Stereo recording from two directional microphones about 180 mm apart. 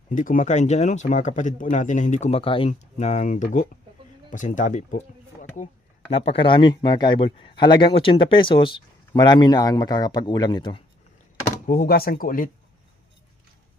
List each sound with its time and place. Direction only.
0.1 s speech: 45° left (ahead or behind); by 10.8 s 25° left (ahead or behind)
11.7 s speech: 60° left (ahead or behind)